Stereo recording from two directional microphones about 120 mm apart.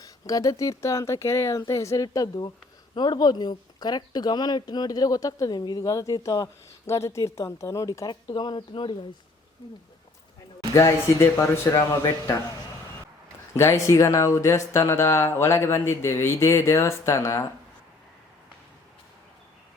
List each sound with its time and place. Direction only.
0.0 s a woman's voice: 30° left (ahead or behind)
10.8 s speech: 25° left (ahead or behind)
13.6 s speech: 25° left (ahead or behind)